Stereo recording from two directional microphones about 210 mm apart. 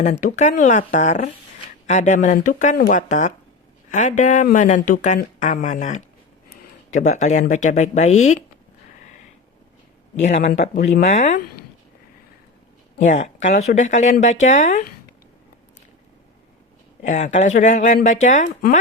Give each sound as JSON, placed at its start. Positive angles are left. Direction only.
{"t": 0.0, "sound": "speech", "side_deg": 35}
{"t": 10.2, "sound": "speech", "side_deg": 35}
{"t": 13.0, "sound": "speech", "side_deg": 35}
{"t": 17.0, "sound": "speech", "side_deg": 35}